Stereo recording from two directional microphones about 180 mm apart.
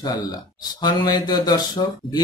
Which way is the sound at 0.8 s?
20° left (ahead or behind).